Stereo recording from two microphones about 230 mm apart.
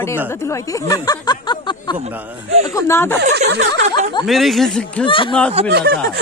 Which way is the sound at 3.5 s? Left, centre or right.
Right.